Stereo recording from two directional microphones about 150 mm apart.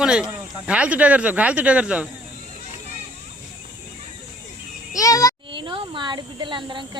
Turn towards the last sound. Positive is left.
turn(degrees=-30)  # may be behind; listen again after turning